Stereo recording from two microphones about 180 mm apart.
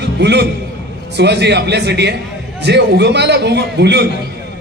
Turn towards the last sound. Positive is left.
turn(degrees=-70)  # may be behind; listen again after turning